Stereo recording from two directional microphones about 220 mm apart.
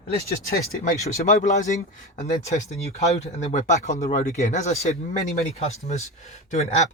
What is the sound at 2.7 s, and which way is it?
Speech, 30° left (ahead or behind).